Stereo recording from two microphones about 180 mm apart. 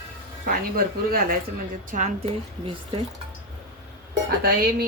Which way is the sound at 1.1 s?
55° right (ahead or behind).